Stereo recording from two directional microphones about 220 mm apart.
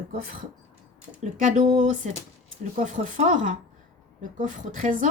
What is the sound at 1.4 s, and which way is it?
Speech, 35° right (ahead or behind).